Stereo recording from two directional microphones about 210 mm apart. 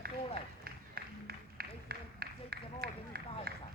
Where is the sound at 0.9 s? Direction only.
45° right (ahead or behind).